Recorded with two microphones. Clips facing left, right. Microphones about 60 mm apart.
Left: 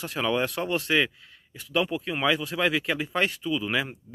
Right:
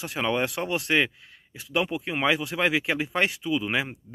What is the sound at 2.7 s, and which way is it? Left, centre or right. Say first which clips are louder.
Speech: right 1 dB; right.